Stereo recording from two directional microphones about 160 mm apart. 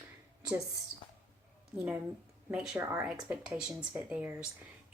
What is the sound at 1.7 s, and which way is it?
A woman's voice, 10° right (ahead or behind).